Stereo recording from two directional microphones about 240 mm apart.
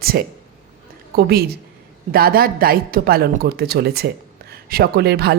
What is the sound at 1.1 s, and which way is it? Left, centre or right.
Speech, right.